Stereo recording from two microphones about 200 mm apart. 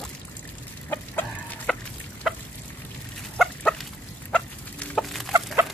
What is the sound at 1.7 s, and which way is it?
Chicken, 5° left (ahead or behind).